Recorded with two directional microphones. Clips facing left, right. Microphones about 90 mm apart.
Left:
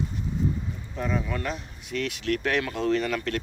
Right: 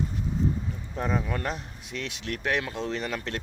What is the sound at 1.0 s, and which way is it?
Speech, 40° right (ahead or behind).